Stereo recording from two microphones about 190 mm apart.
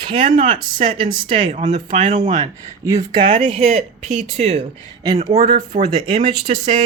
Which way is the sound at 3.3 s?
35° right (ahead or behind).